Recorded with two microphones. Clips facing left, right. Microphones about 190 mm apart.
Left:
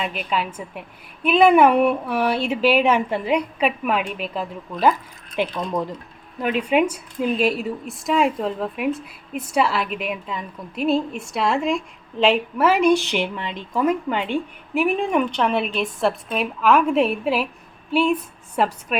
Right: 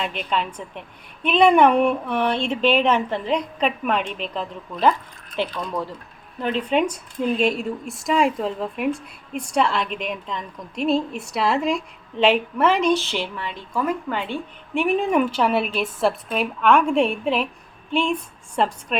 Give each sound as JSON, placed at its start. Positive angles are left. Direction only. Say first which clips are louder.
{"t": 0.0, "sound": "a woman's voice", "louder": "even", "side_deg": 5}
{"t": 5.4, "sound": "speech", "louder": "left 2 dB", "side_deg": 20}
{"t": 14.8, "sound": "speech", "louder": "even", "side_deg": 0}